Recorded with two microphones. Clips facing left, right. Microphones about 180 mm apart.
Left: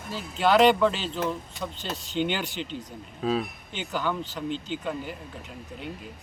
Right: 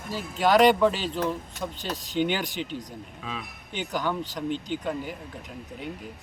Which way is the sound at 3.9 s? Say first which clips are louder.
Even; 15° right (ahead or behind).